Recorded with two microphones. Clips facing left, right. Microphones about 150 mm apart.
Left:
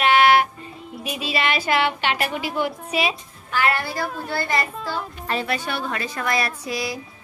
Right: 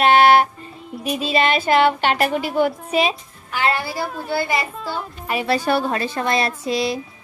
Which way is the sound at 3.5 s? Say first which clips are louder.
Right 1 dB; 20° right (ahead or behind).